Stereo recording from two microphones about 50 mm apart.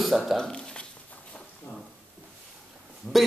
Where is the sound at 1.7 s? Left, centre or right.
Left.